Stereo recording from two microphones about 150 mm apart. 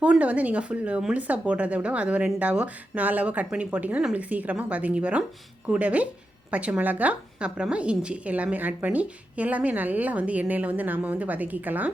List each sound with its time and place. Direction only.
0.0 s a woman's voice: 10° right (ahead or behind)